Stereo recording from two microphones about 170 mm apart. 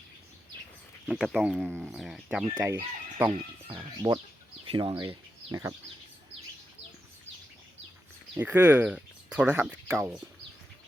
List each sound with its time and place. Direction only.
1.0 s speech: 5° right (ahead or behind)
2.6 s speech: 15° right (ahead or behind)
4.6 s speech: 30° right (ahead or behind)
8.4 s speech: 10° right (ahead or behind)